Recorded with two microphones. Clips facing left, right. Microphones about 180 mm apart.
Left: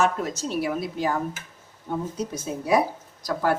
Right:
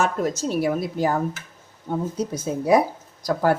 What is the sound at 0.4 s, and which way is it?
Speech, 45° right (ahead or behind).